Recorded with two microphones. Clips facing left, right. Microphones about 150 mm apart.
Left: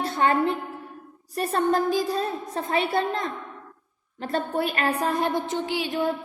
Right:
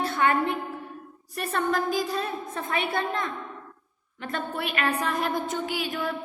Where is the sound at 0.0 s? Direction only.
30° left (ahead or behind).